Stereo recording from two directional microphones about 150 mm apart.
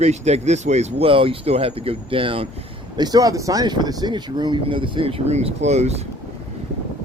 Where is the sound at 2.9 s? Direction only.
25° right (ahead or behind); by 6.1 s 45° right (ahead or behind).